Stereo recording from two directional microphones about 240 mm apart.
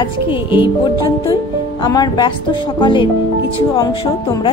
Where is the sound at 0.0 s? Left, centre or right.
Left.